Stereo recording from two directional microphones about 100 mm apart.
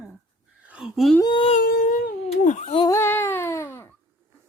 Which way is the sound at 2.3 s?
80° left.